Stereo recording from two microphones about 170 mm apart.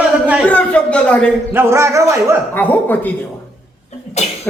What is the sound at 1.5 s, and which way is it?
Speech, 15° right (ahead or behind).